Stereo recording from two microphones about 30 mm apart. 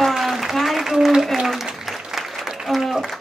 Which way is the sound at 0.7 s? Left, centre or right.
Centre.